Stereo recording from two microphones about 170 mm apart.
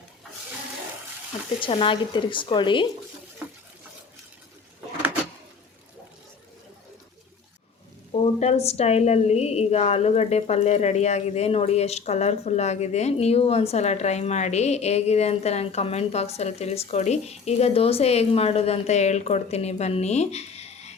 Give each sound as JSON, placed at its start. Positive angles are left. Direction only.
{"t": 1.6, "sound": "speech", "side_deg": 30}
{"t": 8.1, "sound": "a woman's voice", "side_deg": 40}